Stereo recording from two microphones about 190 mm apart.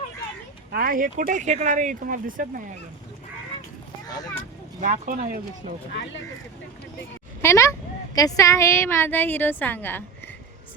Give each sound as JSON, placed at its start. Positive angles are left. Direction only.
{"t": 0.7, "sound": "speech", "side_deg": -50}
{"t": 4.8, "sound": "speech", "side_deg": -45}
{"t": 7.4, "sound": "speech", "side_deg": 15}